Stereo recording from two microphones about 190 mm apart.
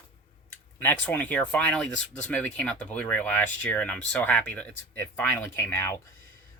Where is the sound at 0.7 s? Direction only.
10° left (ahead or behind).